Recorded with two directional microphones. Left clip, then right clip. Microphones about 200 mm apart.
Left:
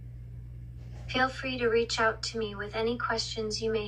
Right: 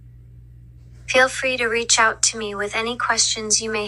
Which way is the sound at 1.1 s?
45° right (ahead or behind).